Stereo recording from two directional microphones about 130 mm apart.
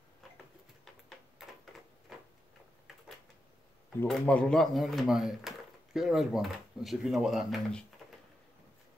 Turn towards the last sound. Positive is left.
turn(degrees=0)  # may be behind; listen again after turning